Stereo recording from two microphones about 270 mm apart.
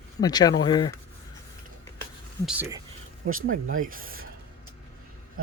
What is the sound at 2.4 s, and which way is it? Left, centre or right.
Speech, centre.